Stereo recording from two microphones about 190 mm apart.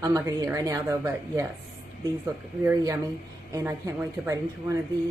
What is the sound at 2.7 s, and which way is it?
A woman's voice, 15° right (ahead or behind).